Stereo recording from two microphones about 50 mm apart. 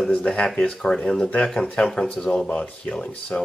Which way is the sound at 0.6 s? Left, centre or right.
Centre.